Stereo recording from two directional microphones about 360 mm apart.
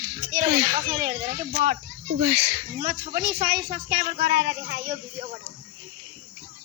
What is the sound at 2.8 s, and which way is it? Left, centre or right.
Speech, right.